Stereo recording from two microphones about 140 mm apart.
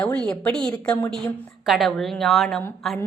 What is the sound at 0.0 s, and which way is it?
A woman's voice, 10° left (ahead or behind).